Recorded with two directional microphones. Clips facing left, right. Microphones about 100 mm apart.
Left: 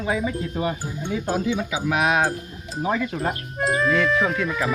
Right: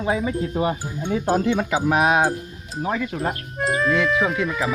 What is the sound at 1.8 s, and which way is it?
Speech, 35° right (ahead or behind).